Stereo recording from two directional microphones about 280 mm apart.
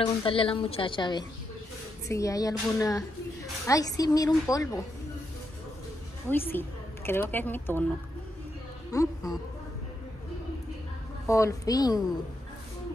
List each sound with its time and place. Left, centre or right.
0.0 s a woman's voice: centre
6.3 s a woman's voice: centre
8.9 s a woman's voice: centre
11.2 s a woman's voice: centre